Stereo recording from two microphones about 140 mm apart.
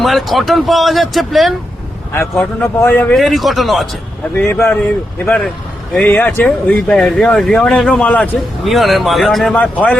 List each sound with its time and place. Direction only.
0.0 s speech: centre (ahead or behind)
3.2 s speech: centre (ahead or behind)
4.4 s speech: 15° left (ahead or behind)